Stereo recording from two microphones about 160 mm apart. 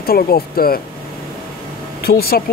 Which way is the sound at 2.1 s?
70° left (ahead or behind).